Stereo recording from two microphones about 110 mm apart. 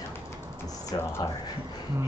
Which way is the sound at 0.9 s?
45° left (ahead or behind).